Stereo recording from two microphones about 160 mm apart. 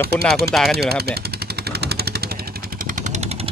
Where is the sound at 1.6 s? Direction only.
80° right.